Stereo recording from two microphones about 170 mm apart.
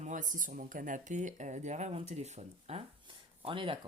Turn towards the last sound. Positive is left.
turn(degrees=-30)  # may be behind; listen again after turning